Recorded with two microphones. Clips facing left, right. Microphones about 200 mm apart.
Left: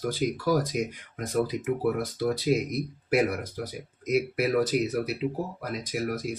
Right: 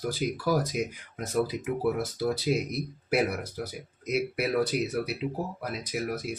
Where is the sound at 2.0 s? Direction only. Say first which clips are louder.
Left 1 dB; centre (ahead or behind).